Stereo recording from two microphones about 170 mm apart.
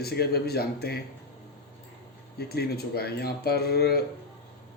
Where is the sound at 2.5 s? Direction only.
65° left (ahead or behind).